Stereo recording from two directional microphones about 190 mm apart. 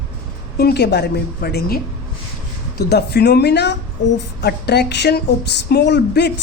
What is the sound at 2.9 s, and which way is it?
A woman's voice, 60° left (ahead or behind).